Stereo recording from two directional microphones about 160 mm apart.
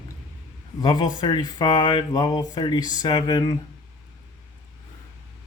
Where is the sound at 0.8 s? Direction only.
25° left (ahead or behind).